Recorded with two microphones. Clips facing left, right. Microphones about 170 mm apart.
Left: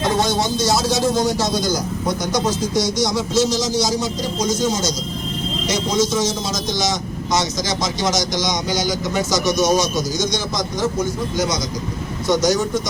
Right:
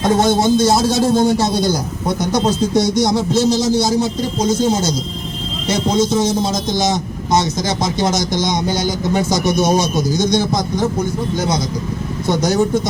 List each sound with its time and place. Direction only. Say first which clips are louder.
0.0 s speech: right 5 dB; 50° right (ahead or behind)
5.9 s speech: right 4 dB; 55° right (ahead or behind)